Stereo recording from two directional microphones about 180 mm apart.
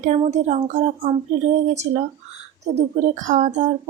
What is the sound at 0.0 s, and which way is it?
A woman's voice, 40° right (ahead or behind).